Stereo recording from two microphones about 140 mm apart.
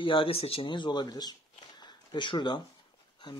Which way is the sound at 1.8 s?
35° left (ahead or behind).